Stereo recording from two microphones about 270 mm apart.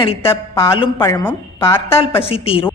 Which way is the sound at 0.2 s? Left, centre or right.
Centre.